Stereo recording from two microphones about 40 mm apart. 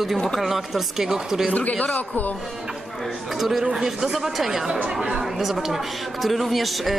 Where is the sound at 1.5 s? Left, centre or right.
Left.